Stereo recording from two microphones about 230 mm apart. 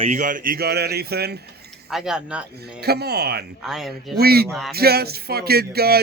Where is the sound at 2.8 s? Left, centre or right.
Right.